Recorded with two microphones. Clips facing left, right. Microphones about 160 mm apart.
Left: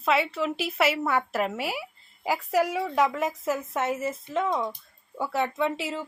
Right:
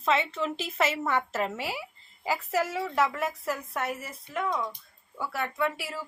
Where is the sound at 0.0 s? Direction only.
10° left (ahead or behind).